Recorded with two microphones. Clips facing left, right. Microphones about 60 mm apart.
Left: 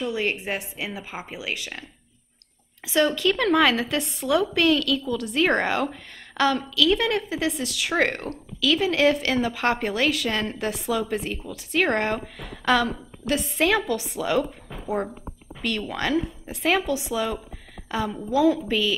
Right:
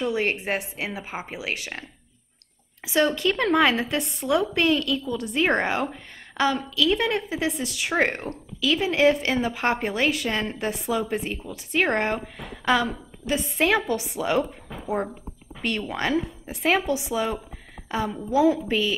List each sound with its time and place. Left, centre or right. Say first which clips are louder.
0.1 s a woman's voice: right 2 dB; right
2.9 s a woman's voice: left 1 dB; right
4.2 s a woman's voice: left 1 dB; centre
4.6 s a woman's voice: left 1 dB; right
14.7 s speech: even; centre
15.6 s a woman's voice: even; right